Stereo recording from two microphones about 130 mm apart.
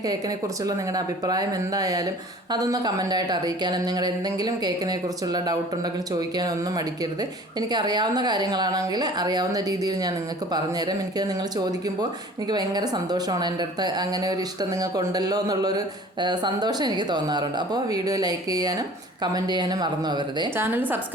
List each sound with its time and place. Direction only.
0.0 s speech: 30° right (ahead or behind)
20.6 s a woman's voice: 15° right (ahead or behind)